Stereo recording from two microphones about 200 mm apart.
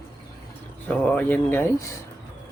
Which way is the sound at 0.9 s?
5° left (ahead or behind).